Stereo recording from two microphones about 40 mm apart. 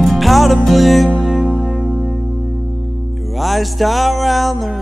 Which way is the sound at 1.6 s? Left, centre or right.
Left.